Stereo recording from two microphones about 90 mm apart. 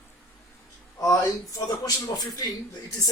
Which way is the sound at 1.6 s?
45° left (ahead or behind).